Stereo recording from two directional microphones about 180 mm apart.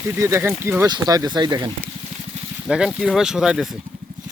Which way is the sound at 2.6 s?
5° right (ahead or behind).